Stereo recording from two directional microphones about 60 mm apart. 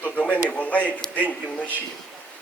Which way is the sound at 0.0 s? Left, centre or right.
Left.